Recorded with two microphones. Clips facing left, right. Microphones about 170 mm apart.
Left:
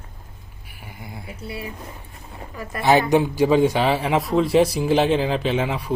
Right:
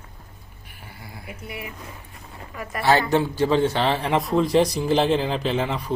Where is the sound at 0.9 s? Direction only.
20° left (ahead or behind).